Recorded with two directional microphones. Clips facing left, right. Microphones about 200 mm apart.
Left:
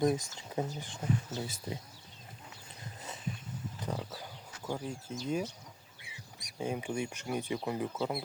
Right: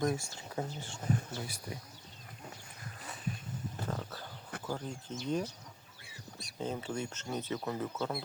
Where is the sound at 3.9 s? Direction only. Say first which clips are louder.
Left 2 dB; 10° left (ahead or behind).